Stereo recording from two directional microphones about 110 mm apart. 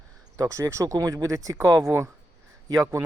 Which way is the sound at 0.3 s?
30° right (ahead or behind).